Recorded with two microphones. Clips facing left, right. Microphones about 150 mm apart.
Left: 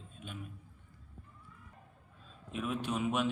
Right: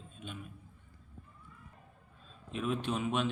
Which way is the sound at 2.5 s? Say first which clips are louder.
Right 1 dB; 5° left (ahead or behind).